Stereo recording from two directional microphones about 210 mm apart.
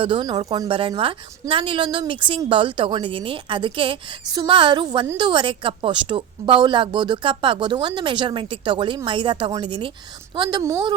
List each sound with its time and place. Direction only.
0.0 s a woman's voice: 25° right (ahead or behind)